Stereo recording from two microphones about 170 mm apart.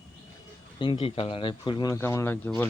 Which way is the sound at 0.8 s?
30° left (ahead or behind).